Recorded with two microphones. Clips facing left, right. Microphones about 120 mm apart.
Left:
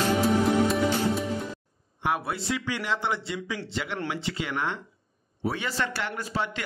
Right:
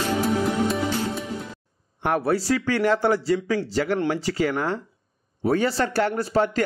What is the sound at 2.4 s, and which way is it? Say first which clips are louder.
A man's voice: right 8 dB; 40° right (ahead or behind).